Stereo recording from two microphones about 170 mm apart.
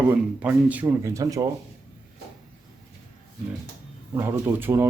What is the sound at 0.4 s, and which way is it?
Speech, 10° right (ahead or behind).